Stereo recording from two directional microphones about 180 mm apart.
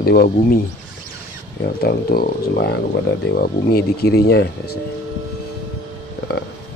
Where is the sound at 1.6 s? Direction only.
60° left (ahead or behind).